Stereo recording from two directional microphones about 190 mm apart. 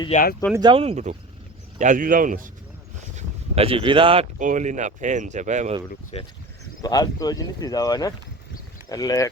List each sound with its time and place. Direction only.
0.1 s speech: 45° left (ahead or behind)
0.5 s speech: 25° right (ahead or behind)
1.8 s a man's voice: 45° right (ahead or behind)
3.2 s speech: 30° right (ahead or behind)
4.4 s speech: 40° right (ahead or behind)
6.1 s speech: 35° left (ahead or behind)
6.8 s speech: 20° left (ahead or behind)